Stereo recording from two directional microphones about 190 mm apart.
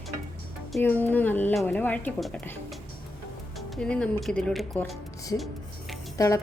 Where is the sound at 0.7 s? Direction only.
10° left (ahead or behind).